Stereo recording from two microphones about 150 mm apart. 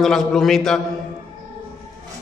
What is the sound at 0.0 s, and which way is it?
Speech, 5° left (ahead or behind).